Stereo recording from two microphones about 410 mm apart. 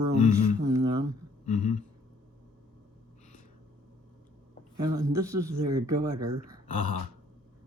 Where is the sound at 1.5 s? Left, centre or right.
Centre.